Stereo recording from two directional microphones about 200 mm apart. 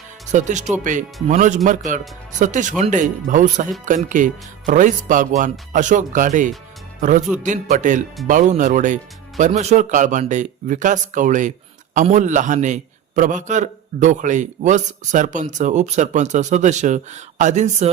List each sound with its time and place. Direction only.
0.3 s a man's voice: 40° right (ahead or behind)